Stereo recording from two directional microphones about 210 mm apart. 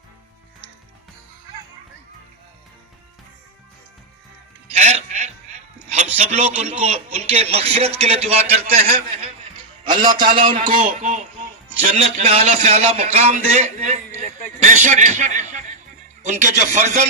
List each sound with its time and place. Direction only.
4.7 s music: 35° right (ahead or behind)
5.9 s speech: 35° right (ahead or behind)
9.8 s a sound: 20° right (ahead or behind)
10.4 s speech: 25° right (ahead or behind)
10.8 s a man's voice: 35° right (ahead or behind)